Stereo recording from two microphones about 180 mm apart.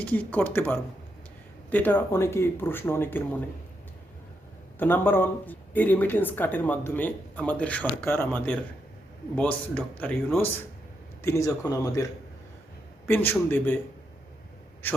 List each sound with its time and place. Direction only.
0.0 s speech: 10° left (ahead or behind)
4.8 s speech: 10° left (ahead or behind)
13.1 s a man's voice: 10° left (ahead or behind)